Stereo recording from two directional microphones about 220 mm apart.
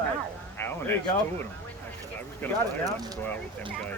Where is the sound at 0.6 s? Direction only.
10° left (ahead or behind).